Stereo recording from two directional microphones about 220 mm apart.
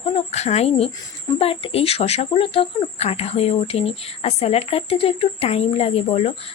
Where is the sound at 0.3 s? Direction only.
30° left (ahead or behind).